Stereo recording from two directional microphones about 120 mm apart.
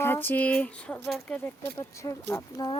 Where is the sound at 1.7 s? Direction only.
25° left (ahead or behind).